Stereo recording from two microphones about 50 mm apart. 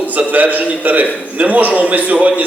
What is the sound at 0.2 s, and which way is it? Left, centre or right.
A man's voice, right.